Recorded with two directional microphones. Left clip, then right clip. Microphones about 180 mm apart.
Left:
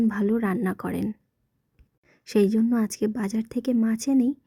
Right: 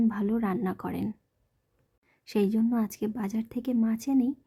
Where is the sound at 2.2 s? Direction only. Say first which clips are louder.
Left 5 dB; 25° left (ahead or behind).